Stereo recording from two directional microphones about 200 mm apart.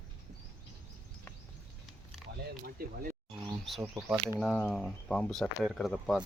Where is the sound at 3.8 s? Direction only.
5° right (ahead or behind).